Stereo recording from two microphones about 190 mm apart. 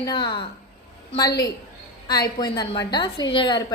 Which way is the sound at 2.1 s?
20° left (ahead or behind).